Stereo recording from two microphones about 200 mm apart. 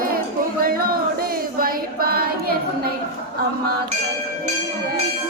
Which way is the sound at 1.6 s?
45° right (ahead or behind).